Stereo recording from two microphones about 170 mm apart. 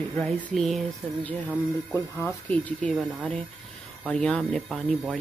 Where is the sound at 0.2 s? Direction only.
5° left (ahead or behind).